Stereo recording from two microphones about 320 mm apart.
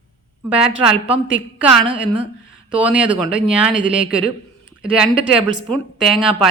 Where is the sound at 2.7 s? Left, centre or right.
Centre.